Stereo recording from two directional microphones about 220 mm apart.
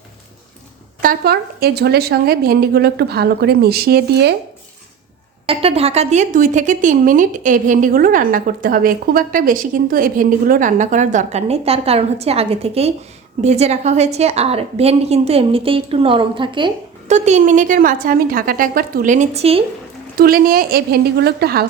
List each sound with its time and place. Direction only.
1.0 s a woman's voice: 45° right (ahead or behind)
5.5 s a woman's voice: 25° right (ahead or behind)
20.1 s a woman's voice: 40° right (ahead or behind)